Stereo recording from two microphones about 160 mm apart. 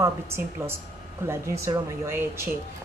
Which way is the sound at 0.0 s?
15° right (ahead or behind).